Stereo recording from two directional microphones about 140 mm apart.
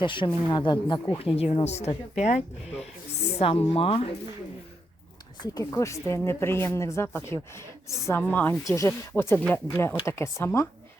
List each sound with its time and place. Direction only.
0.0 s speech: 35° left (ahead or behind)
5.4 s speech: 25° left (ahead or behind)